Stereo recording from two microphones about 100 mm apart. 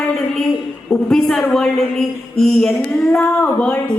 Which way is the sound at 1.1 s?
5° left (ahead or behind).